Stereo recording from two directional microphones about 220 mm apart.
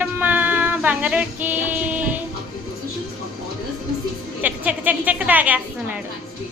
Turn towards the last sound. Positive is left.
turn(degrees=-5)  # may be behind; listen again after turning